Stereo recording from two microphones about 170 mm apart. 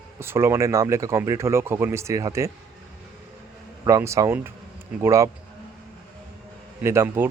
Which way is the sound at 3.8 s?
15° right (ahead or behind).